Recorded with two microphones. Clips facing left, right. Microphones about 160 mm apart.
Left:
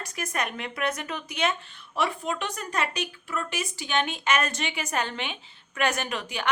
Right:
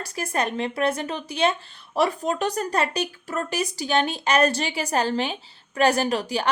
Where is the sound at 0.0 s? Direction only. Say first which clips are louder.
Right 5 dB; 30° right (ahead or behind).